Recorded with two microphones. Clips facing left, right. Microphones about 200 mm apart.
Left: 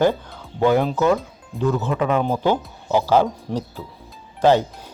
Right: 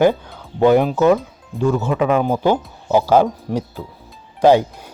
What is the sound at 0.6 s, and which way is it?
Speech, 15° right (ahead or behind).